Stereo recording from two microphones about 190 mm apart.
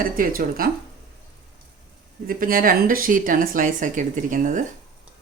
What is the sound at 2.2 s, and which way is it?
Speech, 45° right (ahead or behind).